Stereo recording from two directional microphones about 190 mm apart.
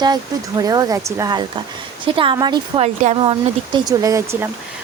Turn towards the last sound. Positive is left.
turn(degrees=-15)  # may be behind; listen again after turning